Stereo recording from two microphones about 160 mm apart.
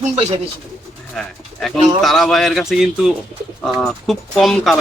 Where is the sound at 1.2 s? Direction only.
5° left (ahead or behind).